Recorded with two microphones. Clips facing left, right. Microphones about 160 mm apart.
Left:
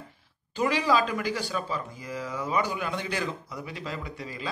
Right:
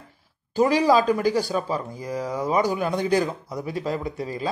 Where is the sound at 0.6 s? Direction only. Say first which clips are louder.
Right 6 dB; 40° right (ahead or behind).